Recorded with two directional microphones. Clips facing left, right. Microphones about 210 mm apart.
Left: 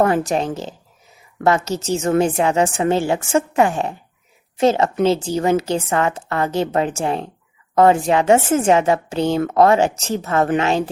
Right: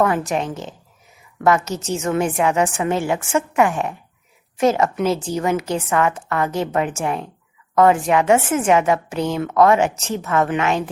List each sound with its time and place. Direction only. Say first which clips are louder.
0.0 s a woman's voice: left 2 dB; 35° left (ahead or behind)